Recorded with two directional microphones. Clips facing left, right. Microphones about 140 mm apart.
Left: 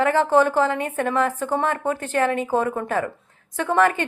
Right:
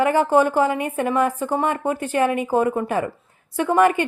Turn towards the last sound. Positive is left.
turn(degrees=-10)  # may be behind; listen again after turning